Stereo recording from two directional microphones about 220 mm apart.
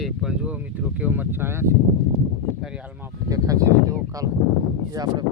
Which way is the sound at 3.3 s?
15° right (ahead or behind).